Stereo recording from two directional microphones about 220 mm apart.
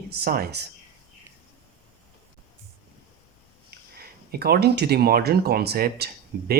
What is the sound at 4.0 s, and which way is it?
Speech, 45° right (ahead or behind).